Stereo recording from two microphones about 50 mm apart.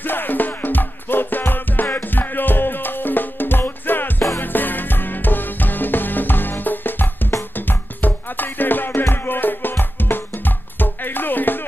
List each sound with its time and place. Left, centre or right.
0.0 s music: left